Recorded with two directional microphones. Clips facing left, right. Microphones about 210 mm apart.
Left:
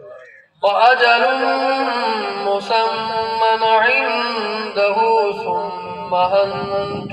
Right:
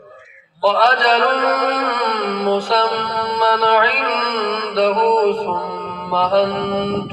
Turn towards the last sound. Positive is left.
turn(degrees=-55)  # may be behind; listen again after turning